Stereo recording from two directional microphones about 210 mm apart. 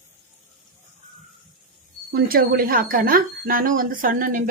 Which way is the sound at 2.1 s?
45° right (ahead or behind).